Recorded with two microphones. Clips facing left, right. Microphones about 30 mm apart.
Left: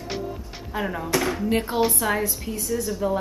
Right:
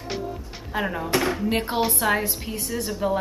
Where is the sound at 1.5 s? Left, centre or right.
Right.